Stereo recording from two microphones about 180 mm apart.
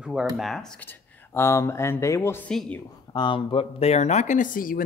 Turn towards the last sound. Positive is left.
turn(degrees=50)  # may be behind; listen again after turning